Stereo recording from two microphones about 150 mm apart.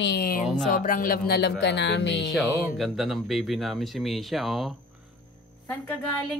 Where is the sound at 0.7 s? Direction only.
70° left (ahead or behind); by 2.3 s 90° left.